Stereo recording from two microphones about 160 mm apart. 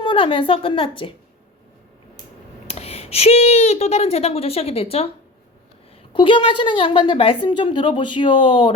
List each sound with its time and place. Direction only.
0.0 s a woman's voice: 30° left (ahead or behind)
2.6 s speech: 40° left (ahead or behind)
6.1 s a woman's voice: 30° left (ahead or behind)